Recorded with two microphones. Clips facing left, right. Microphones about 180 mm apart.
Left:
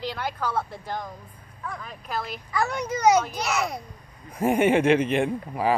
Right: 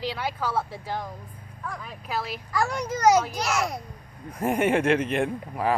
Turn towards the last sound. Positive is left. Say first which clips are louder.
# left 1 dB
turn(degrees=0)  # may be behind; listen again after turning